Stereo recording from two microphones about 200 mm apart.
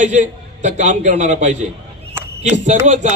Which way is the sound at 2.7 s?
40° right (ahead or behind).